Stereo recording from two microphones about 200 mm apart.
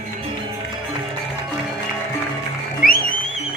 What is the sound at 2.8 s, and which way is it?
Music, 45° left (ahead or behind).